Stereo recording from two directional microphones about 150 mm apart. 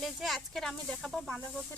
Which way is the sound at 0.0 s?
Centre (ahead or behind).